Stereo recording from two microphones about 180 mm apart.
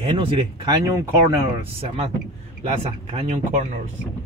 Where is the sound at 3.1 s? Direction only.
35° right (ahead or behind).